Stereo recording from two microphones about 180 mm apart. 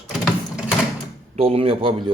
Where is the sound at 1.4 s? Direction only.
30° right (ahead or behind).